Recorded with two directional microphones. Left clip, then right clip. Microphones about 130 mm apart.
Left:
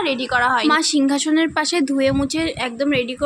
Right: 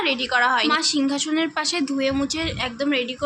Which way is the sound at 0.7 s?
55° left (ahead or behind).